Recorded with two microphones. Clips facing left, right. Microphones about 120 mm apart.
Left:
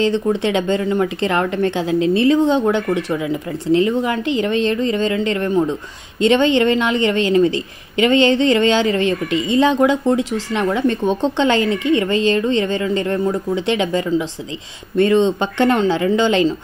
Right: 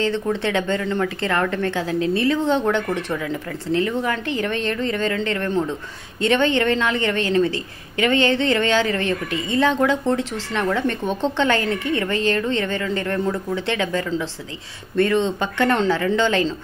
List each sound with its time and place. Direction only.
0.0 s a woman's voice: 15° left (ahead or behind)